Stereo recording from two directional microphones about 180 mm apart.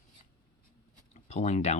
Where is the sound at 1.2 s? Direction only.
40° left (ahead or behind).